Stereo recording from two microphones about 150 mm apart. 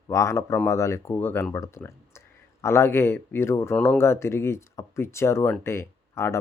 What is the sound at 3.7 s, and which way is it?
Speech, 5° left (ahead or behind).